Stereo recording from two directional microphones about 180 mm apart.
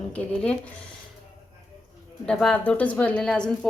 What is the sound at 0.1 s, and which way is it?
Speech, 5° left (ahead or behind).